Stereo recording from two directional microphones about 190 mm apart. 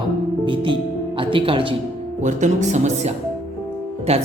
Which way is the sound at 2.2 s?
40° right (ahead or behind).